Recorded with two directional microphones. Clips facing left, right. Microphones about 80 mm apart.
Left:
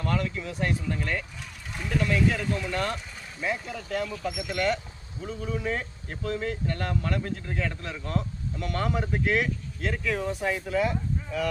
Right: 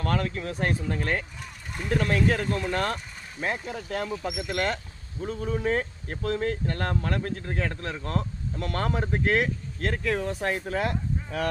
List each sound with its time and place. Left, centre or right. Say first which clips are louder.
0.0 s speech: right 1 dB; right